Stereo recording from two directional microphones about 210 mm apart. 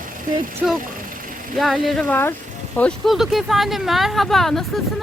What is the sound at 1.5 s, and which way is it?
Speech, centre (ahead or behind).